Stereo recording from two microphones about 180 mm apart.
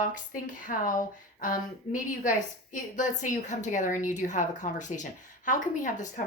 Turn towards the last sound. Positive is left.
turn(degrees=45)  # may be behind; listen again after turning